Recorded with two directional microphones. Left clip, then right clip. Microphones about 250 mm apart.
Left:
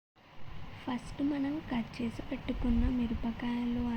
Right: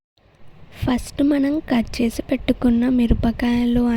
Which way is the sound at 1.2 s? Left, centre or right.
Right.